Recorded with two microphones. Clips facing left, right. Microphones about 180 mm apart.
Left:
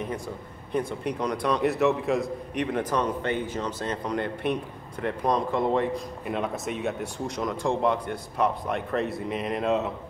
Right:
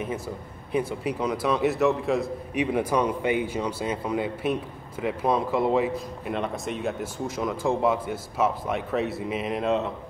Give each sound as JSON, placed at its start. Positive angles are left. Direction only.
{"t": 0.7, "sound": "a man's voice", "side_deg": -5}